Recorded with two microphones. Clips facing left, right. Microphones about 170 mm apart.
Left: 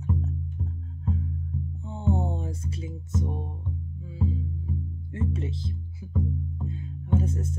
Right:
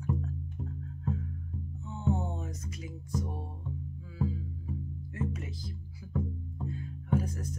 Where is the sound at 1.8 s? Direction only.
30° left (ahead or behind).